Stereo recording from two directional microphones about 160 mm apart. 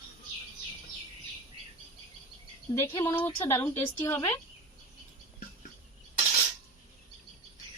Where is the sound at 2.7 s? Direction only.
25° left (ahead or behind).